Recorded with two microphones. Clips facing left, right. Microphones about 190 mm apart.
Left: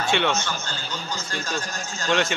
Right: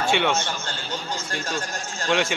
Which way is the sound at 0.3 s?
55° right (ahead or behind).